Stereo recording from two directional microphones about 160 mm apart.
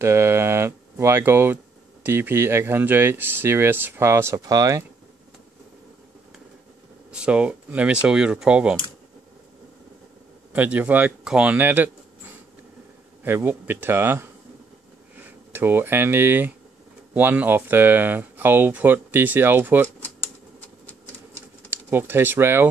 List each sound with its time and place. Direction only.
0.0 s speech: 15° right (ahead or behind)
7.1 s speech: 5° right (ahead or behind)
10.5 s speech: 10° right (ahead or behind)
13.2 s speech: 10° right (ahead or behind)
21.6 s speech: 15° right (ahead or behind)